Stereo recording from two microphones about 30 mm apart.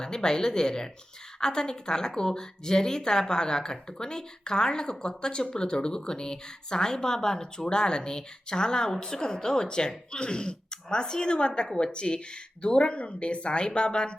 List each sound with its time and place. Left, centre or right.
0.0 s speech: left